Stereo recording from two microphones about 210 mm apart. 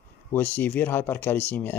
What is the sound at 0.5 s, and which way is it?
A man's voice, 10° left (ahead or behind).